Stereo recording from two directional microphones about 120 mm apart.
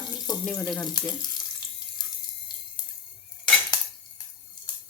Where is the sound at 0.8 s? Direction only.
35° left (ahead or behind).